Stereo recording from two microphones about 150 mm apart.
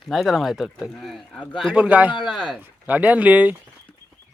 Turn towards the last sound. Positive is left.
turn(degrees=-10)  # may be behind; listen again after turning